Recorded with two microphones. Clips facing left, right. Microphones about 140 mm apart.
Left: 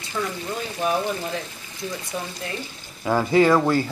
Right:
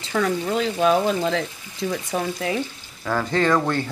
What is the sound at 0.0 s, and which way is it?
Speech, 85° right.